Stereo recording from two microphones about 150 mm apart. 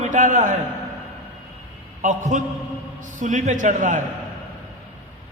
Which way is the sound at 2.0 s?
55° right (ahead or behind).